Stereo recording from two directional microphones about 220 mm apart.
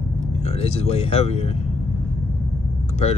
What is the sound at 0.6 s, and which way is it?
Speech, 25° left (ahead or behind).